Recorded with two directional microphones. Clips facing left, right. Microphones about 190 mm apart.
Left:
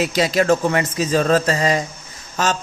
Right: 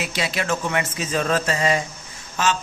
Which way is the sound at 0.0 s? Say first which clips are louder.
Left 8 dB; 40° left (ahead or behind).